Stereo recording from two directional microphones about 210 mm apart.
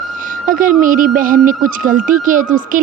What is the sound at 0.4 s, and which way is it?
A woman's voice, 40° right (ahead or behind).